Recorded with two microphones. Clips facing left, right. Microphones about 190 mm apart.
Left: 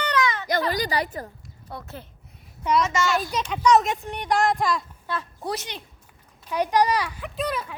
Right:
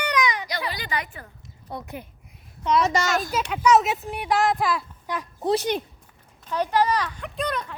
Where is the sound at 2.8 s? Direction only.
40° right (ahead or behind).